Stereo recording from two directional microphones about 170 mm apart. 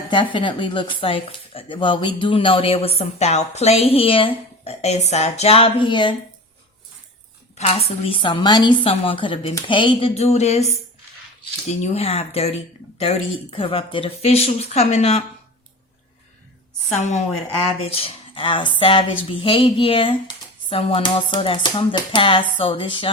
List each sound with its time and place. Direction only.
0.1 s speech: 30° left (ahead or behind)
7.5 s speech: 35° left (ahead or behind)
11.8 s speech: 35° left (ahead or behind)
13.6 s speech: 30° left (ahead or behind)
17.0 s a woman's voice: 45° left (ahead or behind)